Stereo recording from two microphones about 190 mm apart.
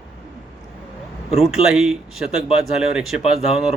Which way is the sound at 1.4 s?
Centre (ahead or behind).